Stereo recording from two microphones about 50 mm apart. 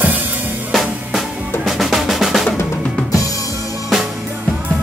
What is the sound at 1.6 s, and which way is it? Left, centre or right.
Drum, centre.